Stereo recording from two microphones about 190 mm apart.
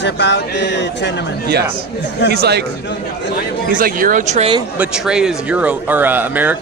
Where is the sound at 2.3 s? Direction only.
60° right (ahead or behind).